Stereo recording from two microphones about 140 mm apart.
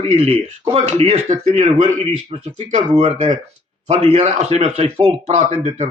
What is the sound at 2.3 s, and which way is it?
A man's voice, 45° right (ahead or behind).